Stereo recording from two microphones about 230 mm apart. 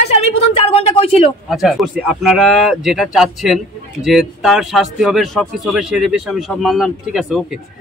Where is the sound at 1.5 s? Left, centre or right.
Centre.